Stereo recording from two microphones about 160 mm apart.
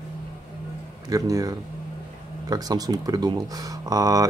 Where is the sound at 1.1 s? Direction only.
20° right (ahead or behind).